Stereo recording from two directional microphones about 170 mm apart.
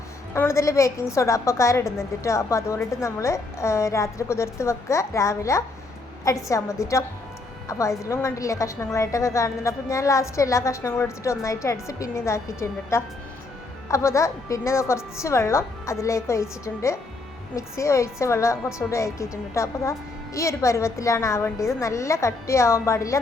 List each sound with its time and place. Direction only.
0.3 s a woman's voice: 15° left (ahead or behind)